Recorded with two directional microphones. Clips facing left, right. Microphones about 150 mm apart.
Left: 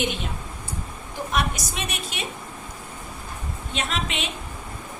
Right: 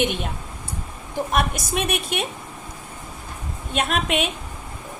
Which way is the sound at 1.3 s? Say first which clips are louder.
Right 2 dB; 55° right (ahead or behind).